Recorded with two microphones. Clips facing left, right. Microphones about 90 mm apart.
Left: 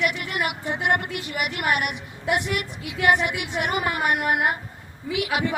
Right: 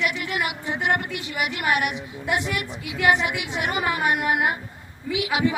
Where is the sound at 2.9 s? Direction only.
Centre (ahead or behind).